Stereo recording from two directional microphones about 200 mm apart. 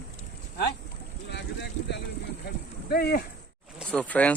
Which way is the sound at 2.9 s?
50° left (ahead or behind).